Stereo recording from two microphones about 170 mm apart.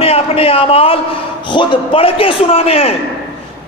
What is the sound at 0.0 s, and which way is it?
A man's voice, 35° left (ahead or behind).